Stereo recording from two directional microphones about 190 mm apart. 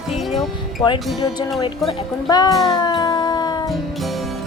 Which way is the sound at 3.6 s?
Centre (ahead or behind).